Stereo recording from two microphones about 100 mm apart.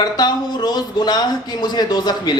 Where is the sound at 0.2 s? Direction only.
45° left (ahead or behind).